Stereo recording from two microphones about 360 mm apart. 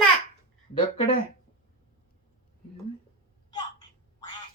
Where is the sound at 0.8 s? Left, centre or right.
Centre.